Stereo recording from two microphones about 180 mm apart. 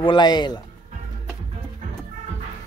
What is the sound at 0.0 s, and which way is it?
Speech, 25° left (ahead or behind).